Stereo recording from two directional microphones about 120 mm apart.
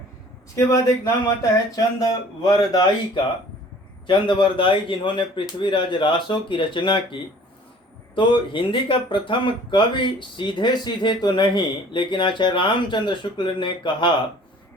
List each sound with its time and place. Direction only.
0.5 s speech: 25° left (ahead or behind)
4.0 s a man's voice: 40° left (ahead or behind)